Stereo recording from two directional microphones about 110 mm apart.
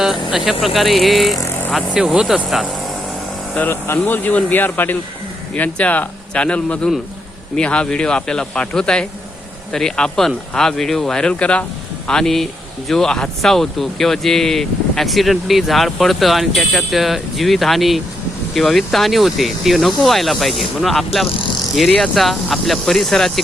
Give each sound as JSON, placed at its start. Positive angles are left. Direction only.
{"t": 0.6, "sound": "speech", "side_deg": 0}
{"t": 3.5, "sound": "speech", "side_deg": 15}